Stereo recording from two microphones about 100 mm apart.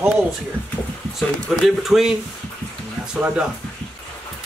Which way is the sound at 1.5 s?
5° right (ahead or behind).